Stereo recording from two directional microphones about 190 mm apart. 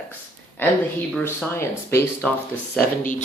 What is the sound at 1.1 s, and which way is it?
Speech, 5° left (ahead or behind).